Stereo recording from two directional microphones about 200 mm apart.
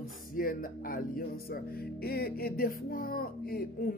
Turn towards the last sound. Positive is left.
turn(degrees=50)  # may be behind; listen again after turning